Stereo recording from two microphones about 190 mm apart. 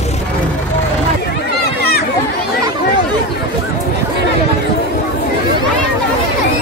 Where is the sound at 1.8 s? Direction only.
55° left (ahead or behind).